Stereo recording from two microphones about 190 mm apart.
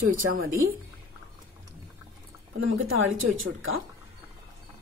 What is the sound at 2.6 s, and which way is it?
Speech, 90° right.